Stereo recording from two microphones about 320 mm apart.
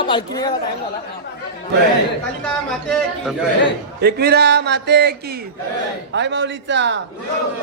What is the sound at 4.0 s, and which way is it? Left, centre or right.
A man's voice, right.